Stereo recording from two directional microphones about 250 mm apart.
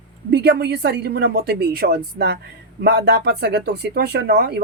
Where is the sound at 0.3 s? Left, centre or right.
Right.